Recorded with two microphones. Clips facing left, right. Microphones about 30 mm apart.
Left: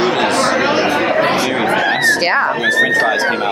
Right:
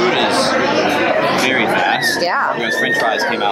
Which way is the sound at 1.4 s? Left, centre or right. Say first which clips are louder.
Right 1 dB; centre.